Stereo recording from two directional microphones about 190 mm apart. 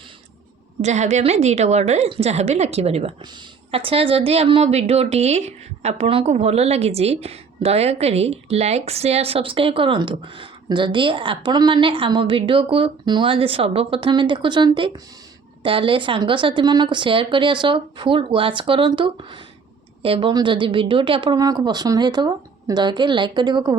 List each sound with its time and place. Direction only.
0.8 s a woman's voice: 35° right (ahead or behind)